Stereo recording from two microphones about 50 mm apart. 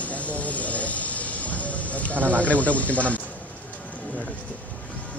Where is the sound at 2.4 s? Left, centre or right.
Left.